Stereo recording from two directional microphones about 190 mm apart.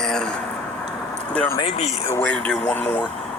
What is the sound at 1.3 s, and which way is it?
Speech, 5° left (ahead or behind).